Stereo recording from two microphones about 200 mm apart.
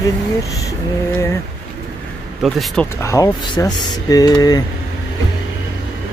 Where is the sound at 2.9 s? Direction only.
15° left (ahead or behind).